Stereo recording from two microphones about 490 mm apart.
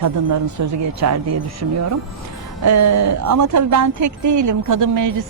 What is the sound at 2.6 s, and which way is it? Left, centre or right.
Speech, right.